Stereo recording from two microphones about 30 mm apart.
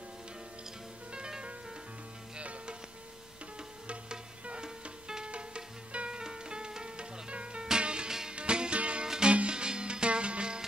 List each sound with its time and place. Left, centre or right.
4.5 s music: right